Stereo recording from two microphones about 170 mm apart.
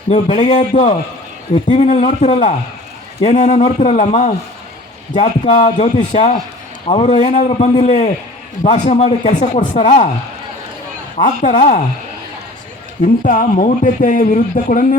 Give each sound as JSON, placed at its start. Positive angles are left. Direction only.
{"t": 0.1, "sound": "a man's voice", "side_deg": 30}
{"t": 0.5, "sound": "a man's voice", "side_deg": 45}
{"t": 11.2, "sound": "a man's voice", "side_deg": 50}
{"t": 13.2, "sound": "a man's voice", "side_deg": 50}